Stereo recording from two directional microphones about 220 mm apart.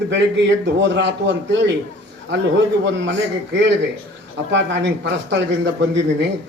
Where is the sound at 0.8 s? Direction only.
55° right (ahead or behind).